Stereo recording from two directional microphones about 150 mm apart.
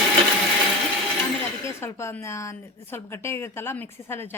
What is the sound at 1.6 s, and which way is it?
A woman's voice, 20° left (ahead or behind).